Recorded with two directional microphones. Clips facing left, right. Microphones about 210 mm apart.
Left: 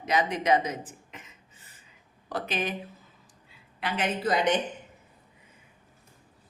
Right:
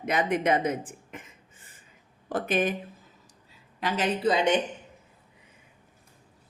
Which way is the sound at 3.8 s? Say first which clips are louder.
Right 2 dB; 40° right (ahead or behind).